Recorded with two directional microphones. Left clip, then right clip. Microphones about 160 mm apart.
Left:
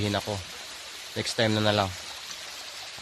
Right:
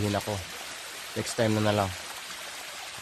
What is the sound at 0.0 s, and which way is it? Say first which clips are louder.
Speech: left 1 dB; 20° left (ahead or behind).